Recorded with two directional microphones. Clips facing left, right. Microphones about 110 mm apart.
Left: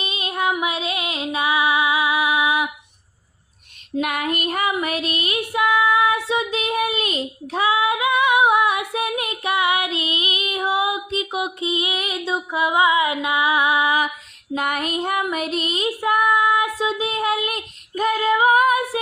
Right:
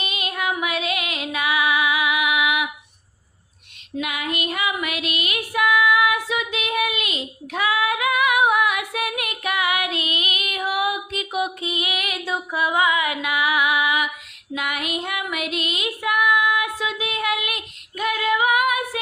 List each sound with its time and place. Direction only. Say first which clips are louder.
0.0 s music: left 3 dB; 30° left (ahead or behind)
4.0 s music: left 3 dB; 45° left (ahead or behind)
14.5 s female singing: left 4 dB; 40° left (ahead or behind)